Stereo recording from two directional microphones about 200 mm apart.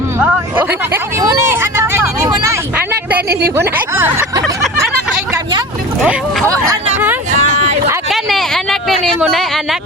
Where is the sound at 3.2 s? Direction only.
50° right (ahead or behind).